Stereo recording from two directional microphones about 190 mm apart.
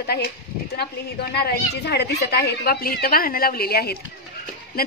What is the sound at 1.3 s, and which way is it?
A woman's voice, 60° left (ahead or behind).